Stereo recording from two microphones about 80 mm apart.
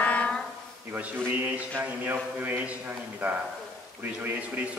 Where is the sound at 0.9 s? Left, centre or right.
Centre.